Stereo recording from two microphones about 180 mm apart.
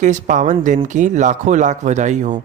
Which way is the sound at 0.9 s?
45° right (ahead or behind).